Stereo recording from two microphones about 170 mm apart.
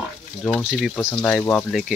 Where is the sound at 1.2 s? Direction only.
10° left (ahead or behind).